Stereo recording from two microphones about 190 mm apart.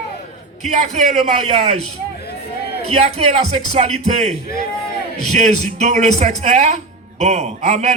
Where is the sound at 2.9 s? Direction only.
35° right (ahead or behind).